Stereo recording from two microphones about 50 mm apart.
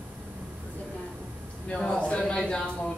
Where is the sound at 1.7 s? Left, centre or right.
Centre.